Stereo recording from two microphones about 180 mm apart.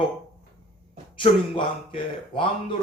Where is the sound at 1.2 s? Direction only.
30° left (ahead or behind).